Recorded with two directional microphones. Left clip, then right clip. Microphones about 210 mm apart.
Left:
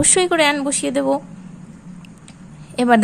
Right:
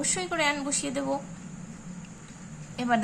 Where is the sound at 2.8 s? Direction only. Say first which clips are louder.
Left 12 dB; 50° left (ahead or behind).